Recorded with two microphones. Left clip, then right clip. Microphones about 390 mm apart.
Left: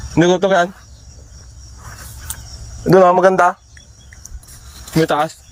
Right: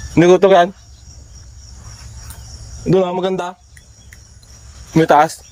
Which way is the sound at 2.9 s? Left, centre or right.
Centre.